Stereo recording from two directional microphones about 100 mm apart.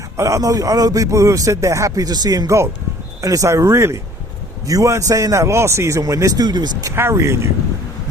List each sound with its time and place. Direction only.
0.2 s speech: 30° right (ahead or behind)
6.9 s speech: 25° right (ahead or behind)